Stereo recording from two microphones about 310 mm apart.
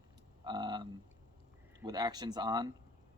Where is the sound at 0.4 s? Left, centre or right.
Centre.